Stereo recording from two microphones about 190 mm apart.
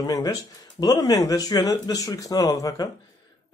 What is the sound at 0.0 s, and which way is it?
Speech, 20° left (ahead or behind).